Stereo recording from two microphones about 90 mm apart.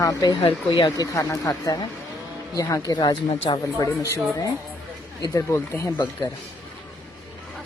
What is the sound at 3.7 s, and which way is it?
Speech, 40° left (ahead or behind).